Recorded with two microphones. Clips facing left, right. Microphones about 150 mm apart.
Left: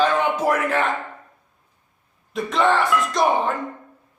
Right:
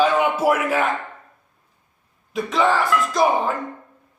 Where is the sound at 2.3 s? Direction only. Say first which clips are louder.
Even; centre (ahead or behind).